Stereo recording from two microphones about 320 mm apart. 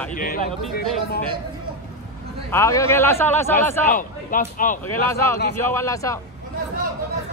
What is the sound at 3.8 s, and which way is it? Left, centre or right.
Speech, left.